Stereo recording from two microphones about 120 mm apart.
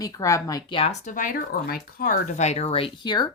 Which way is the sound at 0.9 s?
90° left.